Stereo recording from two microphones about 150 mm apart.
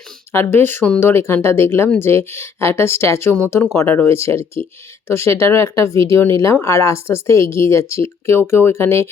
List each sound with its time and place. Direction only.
0.3 s speech: 15° left (ahead or behind)